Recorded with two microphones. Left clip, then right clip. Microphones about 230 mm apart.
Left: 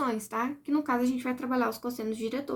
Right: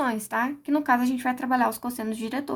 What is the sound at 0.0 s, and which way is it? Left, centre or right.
Speech, right.